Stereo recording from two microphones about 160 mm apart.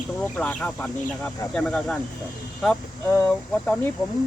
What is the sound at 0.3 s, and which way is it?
Speech, 10° left (ahead or behind).